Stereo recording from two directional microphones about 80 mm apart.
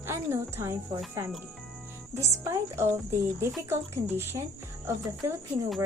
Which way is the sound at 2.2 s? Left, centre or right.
Right.